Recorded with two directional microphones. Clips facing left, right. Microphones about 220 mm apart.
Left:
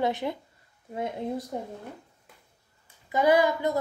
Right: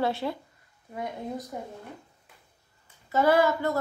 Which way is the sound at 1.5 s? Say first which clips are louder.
Left 3 dB; 30° left (ahead or behind).